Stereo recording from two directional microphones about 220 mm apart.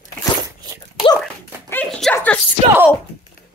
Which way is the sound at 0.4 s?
15° right (ahead or behind).